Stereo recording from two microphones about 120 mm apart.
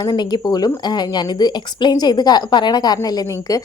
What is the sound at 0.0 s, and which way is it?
Speech, 35° left (ahead or behind).